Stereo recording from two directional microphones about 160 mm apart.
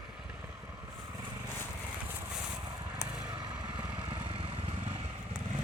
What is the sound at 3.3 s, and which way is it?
Vehicle, 25° right (ahead or behind).